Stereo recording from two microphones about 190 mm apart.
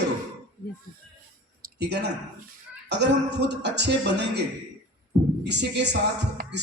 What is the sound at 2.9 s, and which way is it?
A man's voice, 65° right (ahead or behind).